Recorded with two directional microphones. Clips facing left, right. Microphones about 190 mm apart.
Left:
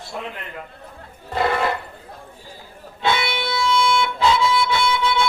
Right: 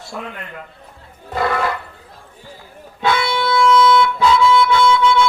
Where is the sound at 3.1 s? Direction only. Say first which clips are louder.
Right 4 dB; 25° left (ahead or behind).